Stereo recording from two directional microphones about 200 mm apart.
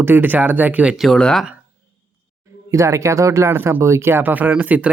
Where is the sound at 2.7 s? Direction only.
15° right (ahead or behind).